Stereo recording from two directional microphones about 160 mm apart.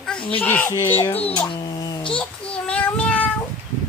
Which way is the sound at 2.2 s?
10° left (ahead or behind).